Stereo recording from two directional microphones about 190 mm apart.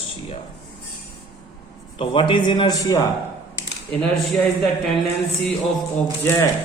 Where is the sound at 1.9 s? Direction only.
25° left (ahead or behind).